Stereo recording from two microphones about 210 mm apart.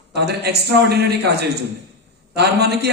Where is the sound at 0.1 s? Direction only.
50° right (ahead or behind).